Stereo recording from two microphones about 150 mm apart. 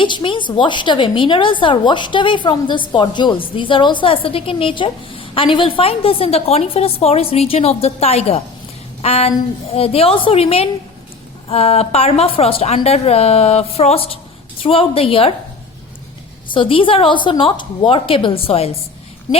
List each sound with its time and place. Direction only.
0.0 s a woman's voice: 35° left (ahead or behind)
16.5 s a woman's voice: 35° left (ahead or behind)
19.3 s a sound: 30° left (ahead or behind)